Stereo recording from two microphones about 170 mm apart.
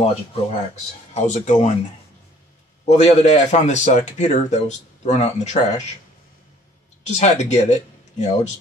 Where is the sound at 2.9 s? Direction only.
40° left (ahead or behind).